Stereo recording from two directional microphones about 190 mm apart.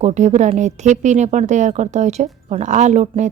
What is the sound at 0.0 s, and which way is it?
Speech, 35° right (ahead or behind).